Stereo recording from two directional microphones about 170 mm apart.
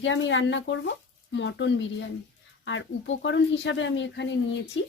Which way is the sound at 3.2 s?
90° left.